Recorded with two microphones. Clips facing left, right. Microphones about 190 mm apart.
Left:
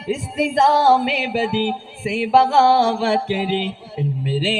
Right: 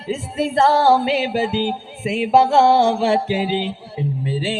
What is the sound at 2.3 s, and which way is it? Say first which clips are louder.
Music: right 1 dB; 20° right (ahead or behind).